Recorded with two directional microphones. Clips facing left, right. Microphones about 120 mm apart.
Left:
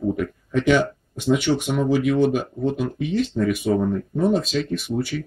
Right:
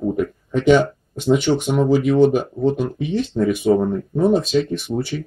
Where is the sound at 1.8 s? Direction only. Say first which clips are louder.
Right 5 dB; 35° right (ahead or behind).